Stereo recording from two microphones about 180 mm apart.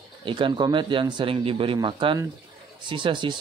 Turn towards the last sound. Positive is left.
turn(degrees=-25)  # may be behind; listen again after turning